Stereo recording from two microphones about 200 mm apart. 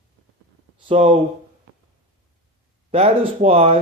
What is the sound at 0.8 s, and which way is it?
Speech, 25° right (ahead or behind).